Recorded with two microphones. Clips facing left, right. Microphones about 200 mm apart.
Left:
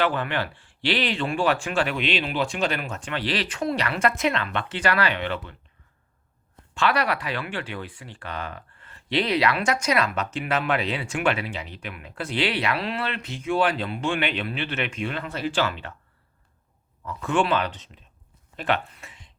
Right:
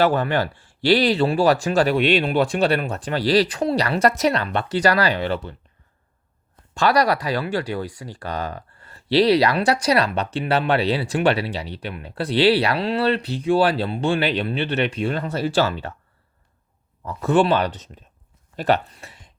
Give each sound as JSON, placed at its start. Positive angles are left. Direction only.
{"t": 0.0, "sound": "speech", "side_deg": -40}
{"t": 2.0, "sound": "speech", "side_deg": -50}
{"t": 2.6, "sound": "speech", "side_deg": -35}
{"t": 6.7, "sound": "speech", "side_deg": -40}
{"t": 17.0, "sound": "speech", "side_deg": -40}